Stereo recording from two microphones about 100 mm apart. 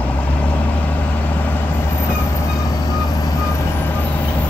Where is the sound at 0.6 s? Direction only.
15° left (ahead or behind); by 3.7 s 35° left (ahead or behind).